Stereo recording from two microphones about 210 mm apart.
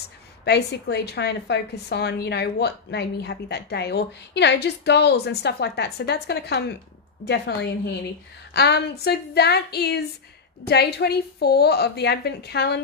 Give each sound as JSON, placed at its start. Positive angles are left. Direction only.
{"t": 0.5, "sound": "a woman's voice", "side_deg": 50}